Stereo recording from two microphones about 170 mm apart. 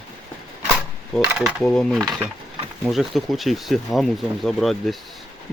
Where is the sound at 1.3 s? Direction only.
Centre (ahead or behind).